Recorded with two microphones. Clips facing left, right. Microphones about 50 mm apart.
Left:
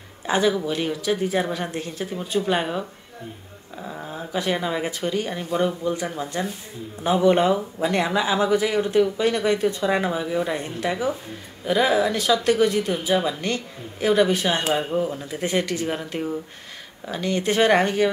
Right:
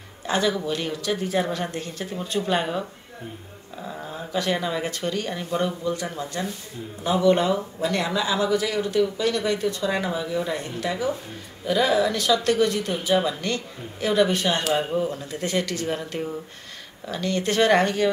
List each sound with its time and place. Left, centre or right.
0.3 s speech: centre
14.7 s speech: centre
15.0 s speech: centre